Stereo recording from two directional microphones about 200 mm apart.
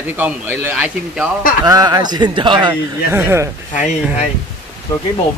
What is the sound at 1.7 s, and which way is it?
A man's voice, 20° right (ahead or behind).